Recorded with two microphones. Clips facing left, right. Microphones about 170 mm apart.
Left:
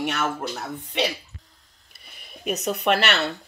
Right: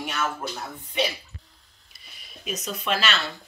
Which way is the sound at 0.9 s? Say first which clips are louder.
Left 1 dB; 70° left (ahead or behind).